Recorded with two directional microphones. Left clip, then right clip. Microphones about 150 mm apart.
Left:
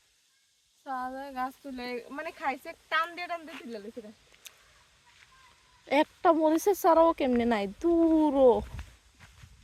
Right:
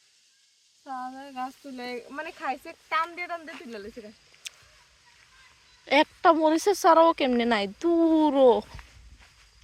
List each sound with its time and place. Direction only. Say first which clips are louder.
0.9 s speech: left 1 dB; 20° left (ahead or behind)
1.7 s speech: right 1 dB; 15° right (ahead or behind)
2.0 s speech: right 1 dB; 35° right (ahead or behind)
3.0 s speech: right 2 dB; 55° right (ahead or behind)
4.4 s a sound: right 10 dB; 5° left (ahead or behind)
5.8 s speech: right 4 dB; centre (ahead or behind)